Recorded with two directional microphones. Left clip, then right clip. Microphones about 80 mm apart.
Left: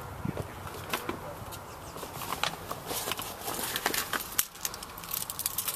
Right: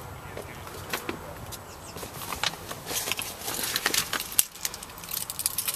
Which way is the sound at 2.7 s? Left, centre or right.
Centre.